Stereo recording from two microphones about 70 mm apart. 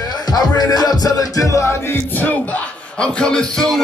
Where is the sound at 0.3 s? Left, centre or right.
Left.